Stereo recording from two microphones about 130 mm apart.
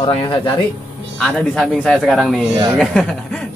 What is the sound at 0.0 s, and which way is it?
Speech, 40° left (ahead or behind).